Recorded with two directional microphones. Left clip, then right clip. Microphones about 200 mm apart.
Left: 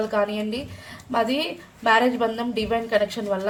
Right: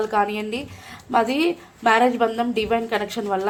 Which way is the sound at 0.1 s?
45° right (ahead or behind).